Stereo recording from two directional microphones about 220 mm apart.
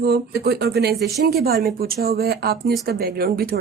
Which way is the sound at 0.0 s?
45° right (ahead or behind).